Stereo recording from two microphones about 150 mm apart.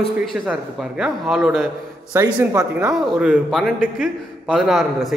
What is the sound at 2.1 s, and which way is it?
Speech, 20° right (ahead or behind).